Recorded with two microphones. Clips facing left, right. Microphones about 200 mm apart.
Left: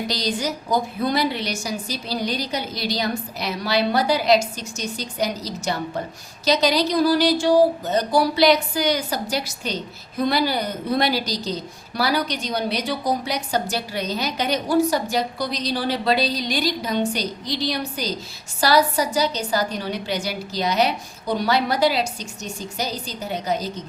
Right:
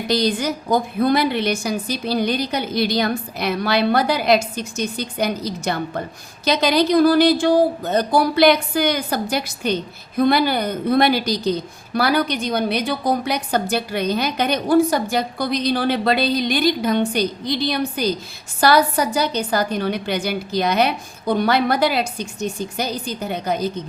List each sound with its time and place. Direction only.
0.1 s a woman's voice: 55° right (ahead or behind)